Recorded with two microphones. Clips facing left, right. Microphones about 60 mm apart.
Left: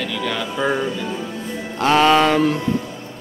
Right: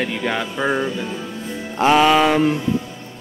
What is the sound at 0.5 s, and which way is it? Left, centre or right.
Music, centre.